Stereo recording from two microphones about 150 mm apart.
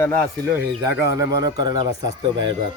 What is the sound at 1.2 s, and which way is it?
Speech, 25° right (ahead or behind).